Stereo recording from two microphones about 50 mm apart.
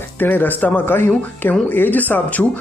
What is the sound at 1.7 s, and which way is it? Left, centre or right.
Speech, left.